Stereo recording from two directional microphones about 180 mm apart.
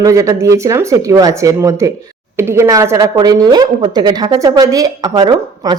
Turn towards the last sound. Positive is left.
turn(degrees=-20)  # may be behind; listen again after turning